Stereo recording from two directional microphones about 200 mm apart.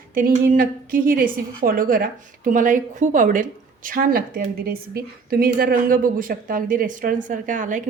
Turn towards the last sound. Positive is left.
turn(degrees=-40)  # may be behind; listen again after turning